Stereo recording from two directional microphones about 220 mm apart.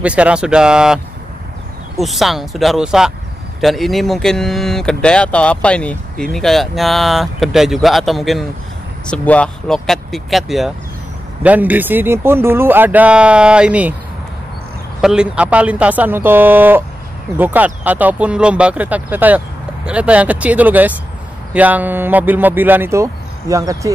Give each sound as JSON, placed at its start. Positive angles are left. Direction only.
{"t": 0.0, "sound": "speech", "side_deg": -5}
{"t": 15.0, "sound": "speech", "side_deg": -5}